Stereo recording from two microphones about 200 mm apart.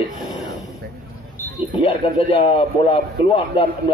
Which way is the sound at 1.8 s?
25° left (ahead or behind).